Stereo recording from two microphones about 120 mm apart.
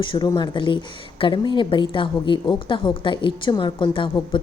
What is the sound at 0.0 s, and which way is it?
A woman's voice, 45° left (ahead or behind).